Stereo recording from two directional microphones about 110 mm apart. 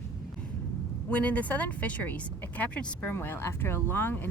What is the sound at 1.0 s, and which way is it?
A woman's voice, 15° left (ahead or behind).